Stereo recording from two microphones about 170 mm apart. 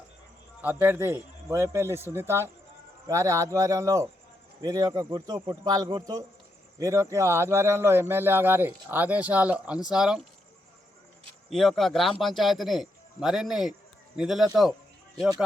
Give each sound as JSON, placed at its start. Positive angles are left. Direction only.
{"t": 0.6, "sound": "a man's voice", "side_deg": -10}
{"t": 11.4, "sound": "speech", "side_deg": 0}